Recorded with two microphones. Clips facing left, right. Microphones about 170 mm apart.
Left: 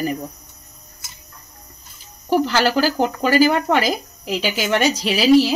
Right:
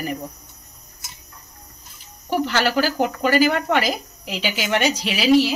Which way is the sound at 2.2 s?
40° left (ahead or behind).